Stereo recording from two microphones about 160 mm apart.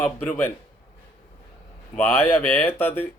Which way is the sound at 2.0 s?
15° left (ahead or behind).